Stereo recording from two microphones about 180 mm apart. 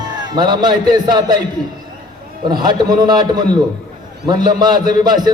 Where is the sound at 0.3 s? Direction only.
25° right (ahead or behind).